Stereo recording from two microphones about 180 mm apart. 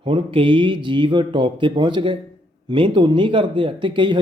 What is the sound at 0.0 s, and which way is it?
A man's voice, 30° right (ahead or behind).